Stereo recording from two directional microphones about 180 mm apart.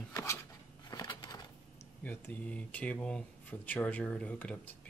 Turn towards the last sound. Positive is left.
turn(degrees=10)  # may be behind; listen again after turning